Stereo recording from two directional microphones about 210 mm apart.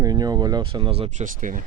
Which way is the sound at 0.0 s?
15° right (ahead or behind).